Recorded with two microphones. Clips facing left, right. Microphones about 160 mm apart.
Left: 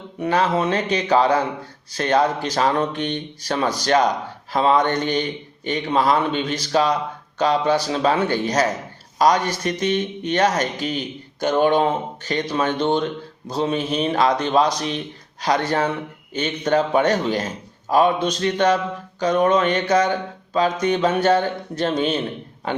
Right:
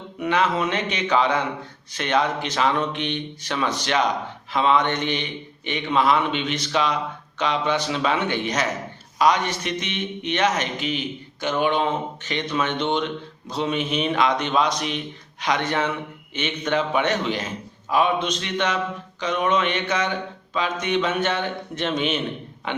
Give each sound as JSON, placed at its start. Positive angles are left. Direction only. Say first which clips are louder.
{"t": 0.2, "sound": "a man's voice", "louder": "left 2 dB", "side_deg": 35}